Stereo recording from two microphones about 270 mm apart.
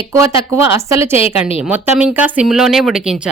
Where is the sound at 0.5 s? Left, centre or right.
Centre.